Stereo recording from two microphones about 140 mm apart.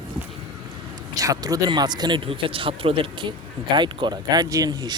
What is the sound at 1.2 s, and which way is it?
Speech, 25° right (ahead or behind).